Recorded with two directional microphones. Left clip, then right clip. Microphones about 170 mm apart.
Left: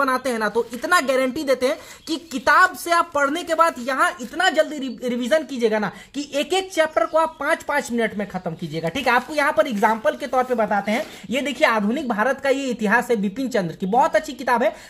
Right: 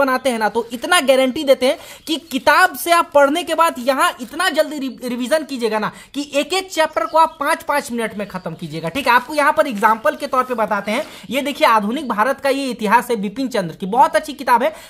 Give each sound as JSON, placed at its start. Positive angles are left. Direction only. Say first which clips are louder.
{"t": 0.0, "sound": "a woman's voice", "louder": "right 4 dB", "side_deg": -25}
{"t": 4.4, "sound": "a woman's voice", "louder": "right 1 dB", "side_deg": -20}